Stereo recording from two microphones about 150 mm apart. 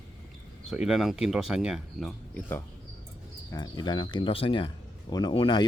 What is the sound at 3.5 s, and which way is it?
Speech, 25° left (ahead or behind).